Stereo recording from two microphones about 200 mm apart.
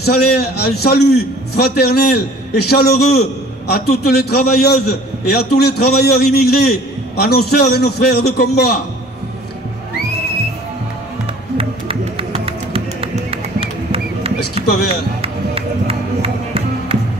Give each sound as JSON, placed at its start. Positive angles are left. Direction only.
{"t": 0.0, "sound": "a man's voice", "side_deg": 55}
{"t": 11.5, "sound": "music", "side_deg": -30}